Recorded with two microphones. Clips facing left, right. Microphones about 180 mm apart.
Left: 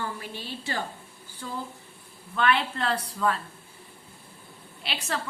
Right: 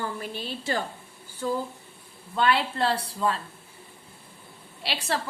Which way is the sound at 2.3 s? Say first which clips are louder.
Right 1 dB; 30° right (ahead or behind).